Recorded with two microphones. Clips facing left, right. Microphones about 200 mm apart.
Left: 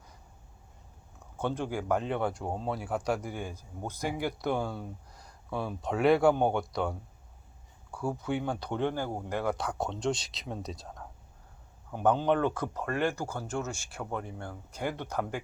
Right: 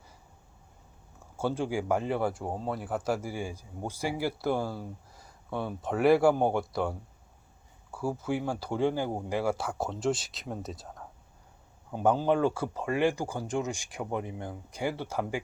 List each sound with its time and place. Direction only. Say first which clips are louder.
1.4 s speech: right 2 dB; 10° right (ahead or behind)